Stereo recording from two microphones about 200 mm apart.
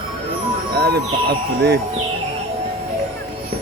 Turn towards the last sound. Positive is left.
turn(degrees=-55)  # may be behind; listen again after turning